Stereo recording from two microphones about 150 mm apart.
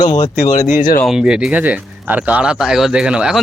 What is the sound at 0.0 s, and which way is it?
Speech, 50° left (ahead or behind).